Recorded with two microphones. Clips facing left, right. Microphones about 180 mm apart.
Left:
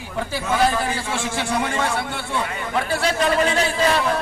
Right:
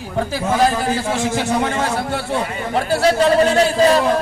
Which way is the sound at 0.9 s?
40° right (ahead or behind).